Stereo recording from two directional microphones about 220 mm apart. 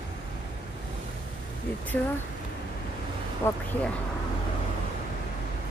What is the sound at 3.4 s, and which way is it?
Speech, 10° left (ahead or behind).